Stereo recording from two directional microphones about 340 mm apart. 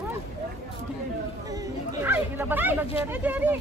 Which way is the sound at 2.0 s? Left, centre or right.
Centre.